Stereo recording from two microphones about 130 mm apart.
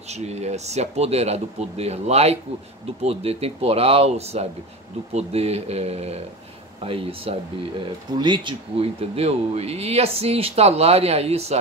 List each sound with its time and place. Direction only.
0.1 s speech: 60° right (ahead or behind)